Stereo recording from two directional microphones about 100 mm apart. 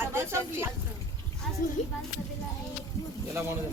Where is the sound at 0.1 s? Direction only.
25° right (ahead or behind).